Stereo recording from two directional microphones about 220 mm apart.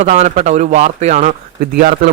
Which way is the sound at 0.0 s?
30° right (ahead or behind).